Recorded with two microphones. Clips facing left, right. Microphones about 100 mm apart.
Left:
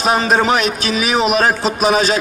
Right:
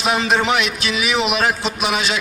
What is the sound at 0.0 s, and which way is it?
A man's voice, 40° left (ahead or behind).